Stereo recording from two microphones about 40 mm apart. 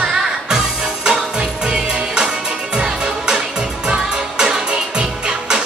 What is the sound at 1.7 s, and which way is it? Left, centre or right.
Music, right.